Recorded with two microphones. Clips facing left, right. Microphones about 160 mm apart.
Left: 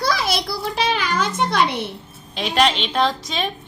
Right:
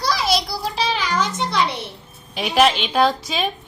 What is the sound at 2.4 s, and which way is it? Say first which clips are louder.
A woman's voice: right 2 dB; 5° right (ahead or behind).